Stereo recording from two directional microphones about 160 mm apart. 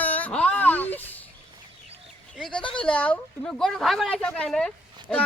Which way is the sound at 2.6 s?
30° left (ahead or behind).